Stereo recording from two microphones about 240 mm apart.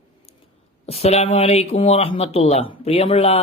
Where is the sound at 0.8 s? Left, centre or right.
Left.